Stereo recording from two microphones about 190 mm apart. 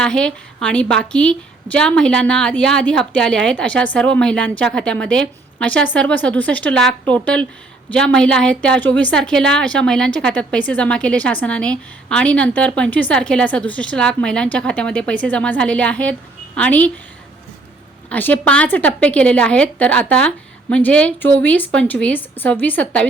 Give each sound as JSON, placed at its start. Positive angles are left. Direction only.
{"t": 0.0, "sound": "a woman's voice", "side_deg": 5}
{"t": 18.1, "sound": "a woman's voice", "side_deg": 10}